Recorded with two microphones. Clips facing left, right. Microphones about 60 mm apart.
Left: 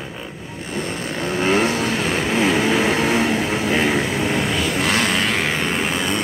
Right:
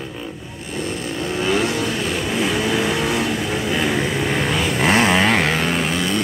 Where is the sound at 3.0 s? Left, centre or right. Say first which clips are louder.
Left 2 dB; left.